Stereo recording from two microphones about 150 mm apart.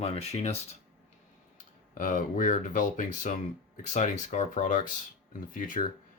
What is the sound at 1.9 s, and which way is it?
Speech, 60° left (ahead or behind).